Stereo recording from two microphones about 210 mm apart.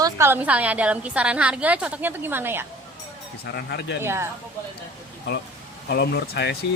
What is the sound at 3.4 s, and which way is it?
Speech, 50° left (ahead or behind).